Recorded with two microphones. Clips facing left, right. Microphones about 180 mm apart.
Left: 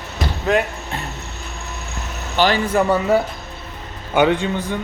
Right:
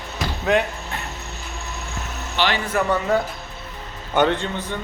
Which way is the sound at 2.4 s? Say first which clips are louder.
Left 5 dB; 45° left (ahead or behind).